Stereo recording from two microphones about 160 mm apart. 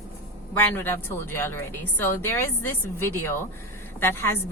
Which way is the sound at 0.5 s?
15° left (ahead or behind).